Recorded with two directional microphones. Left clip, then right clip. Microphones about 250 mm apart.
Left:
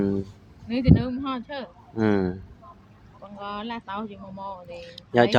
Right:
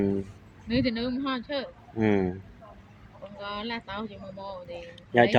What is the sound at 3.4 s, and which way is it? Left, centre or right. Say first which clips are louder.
Speech: left 1 dB; left.